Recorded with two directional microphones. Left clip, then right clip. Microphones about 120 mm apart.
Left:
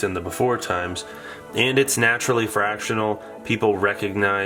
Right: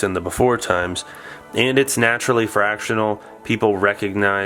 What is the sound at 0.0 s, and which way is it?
Speech, 40° right (ahead or behind).